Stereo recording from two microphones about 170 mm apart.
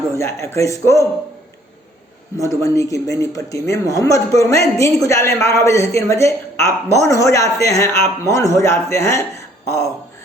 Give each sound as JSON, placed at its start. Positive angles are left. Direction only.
{"t": 0.1, "sound": "speech", "side_deg": 15}
{"t": 2.4, "sound": "speech", "side_deg": 20}